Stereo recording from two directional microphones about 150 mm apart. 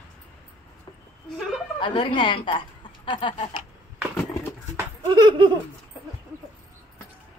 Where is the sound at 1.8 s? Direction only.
35° left (ahead or behind).